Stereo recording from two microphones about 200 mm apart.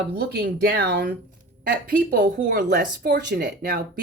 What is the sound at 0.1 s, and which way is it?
Speech, 50° right (ahead or behind).